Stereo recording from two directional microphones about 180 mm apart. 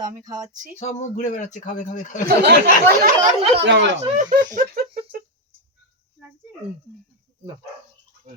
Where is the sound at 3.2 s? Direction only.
40° right (ahead or behind).